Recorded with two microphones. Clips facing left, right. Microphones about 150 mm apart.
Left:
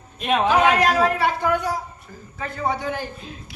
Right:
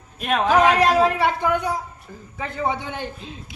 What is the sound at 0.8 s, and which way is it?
A man's voice, 30° right (ahead or behind).